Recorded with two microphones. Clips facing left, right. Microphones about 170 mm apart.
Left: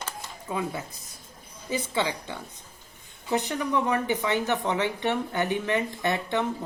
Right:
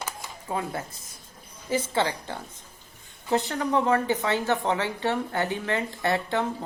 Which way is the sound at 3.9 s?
15° left (ahead or behind).